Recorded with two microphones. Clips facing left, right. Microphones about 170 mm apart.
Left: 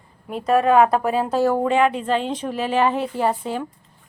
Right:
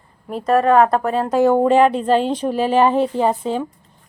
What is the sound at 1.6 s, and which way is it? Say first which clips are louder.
A woman's voice: right 5 dB; 35° right (ahead or behind).